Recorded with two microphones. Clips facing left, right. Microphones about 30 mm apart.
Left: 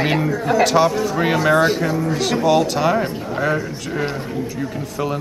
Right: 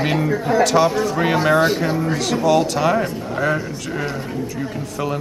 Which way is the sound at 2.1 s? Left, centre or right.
Centre.